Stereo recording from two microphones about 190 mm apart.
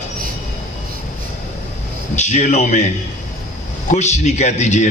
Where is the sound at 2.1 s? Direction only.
35° left (ahead or behind).